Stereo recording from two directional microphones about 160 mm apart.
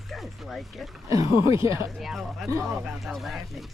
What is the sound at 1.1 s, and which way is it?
Speech, 20° right (ahead or behind).